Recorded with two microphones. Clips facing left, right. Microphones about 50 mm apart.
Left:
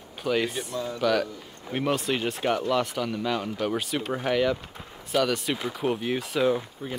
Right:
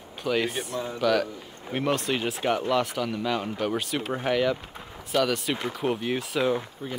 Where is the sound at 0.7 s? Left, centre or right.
Right.